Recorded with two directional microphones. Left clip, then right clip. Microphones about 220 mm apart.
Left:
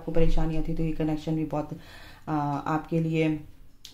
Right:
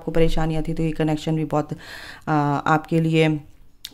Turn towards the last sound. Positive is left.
turn(degrees=-45)  # may be behind; listen again after turning